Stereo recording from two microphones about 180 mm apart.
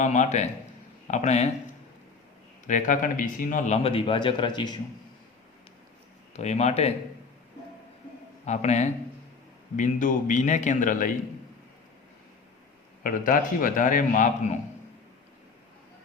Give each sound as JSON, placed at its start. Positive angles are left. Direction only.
{"t": 0.0, "sound": "a man's voice", "side_deg": 40}
{"t": 2.6, "sound": "a man's voice", "side_deg": 45}
{"t": 6.3, "sound": "a man's voice", "side_deg": 40}
{"t": 8.4, "sound": "a man's voice", "side_deg": 40}
{"t": 13.0, "sound": "a man's voice", "side_deg": 50}